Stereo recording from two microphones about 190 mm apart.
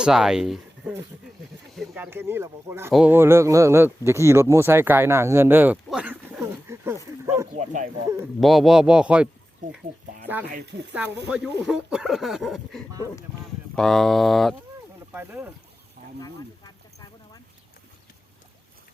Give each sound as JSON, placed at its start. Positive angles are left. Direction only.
{"t": 0.0, "sound": "speech", "side_deg": -5}
{"t": 2.0, "sound": "speech", "side_deg": -10}
{"t": 7.5, "sound": "bow-wow", "side_deg": -40}
{"t": 8.4, "sound": "speech", "side_deg": 0}
{"t": 9.6, "sound": "speech", "side_deg": -45}
{"t": 10.5, "sound": "speech", "side_deg": -60}
{"t": 11.3, "sound": "speech", "side_deg": -5}
{"t": 15.1, "sound": "speech", "side_deg": -10}